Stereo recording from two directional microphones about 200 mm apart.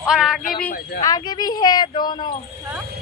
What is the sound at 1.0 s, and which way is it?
Speech, 20° left (ahead or behind).